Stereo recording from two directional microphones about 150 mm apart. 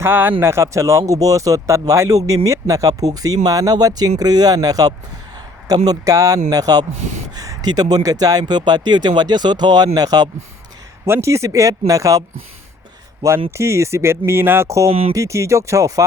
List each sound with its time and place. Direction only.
0.0 s speech: 15° right (ahead or behind)
13.5 s speech: 20° right (ahead or behind)
14.8 s speech: 40° right (ahead or behind)
15.1 s speech: 20° right (ahead or behind)